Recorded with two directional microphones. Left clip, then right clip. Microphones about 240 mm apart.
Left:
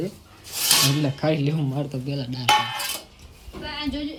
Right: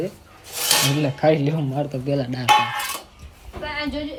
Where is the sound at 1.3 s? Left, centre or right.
Right.